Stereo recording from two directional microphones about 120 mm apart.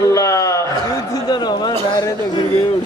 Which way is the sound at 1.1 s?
35° left (ahead or behind).